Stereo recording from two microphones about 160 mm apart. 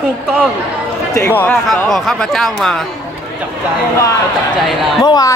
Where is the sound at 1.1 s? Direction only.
15° left (ahead or behind).